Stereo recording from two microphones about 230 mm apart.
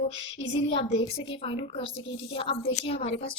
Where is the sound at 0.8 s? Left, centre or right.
Left.